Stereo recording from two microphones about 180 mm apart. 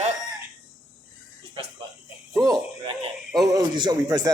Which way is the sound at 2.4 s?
25° right (ahead or behind).